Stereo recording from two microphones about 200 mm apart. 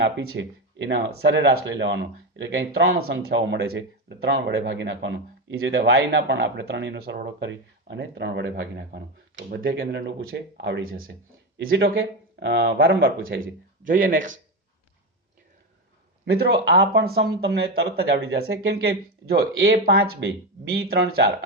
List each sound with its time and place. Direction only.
0.0 s speech: 60° right (ahead or behind); by 14.3 s 40° right (ahead or behind)
16.2 s speech: 55° right (ahead or behind)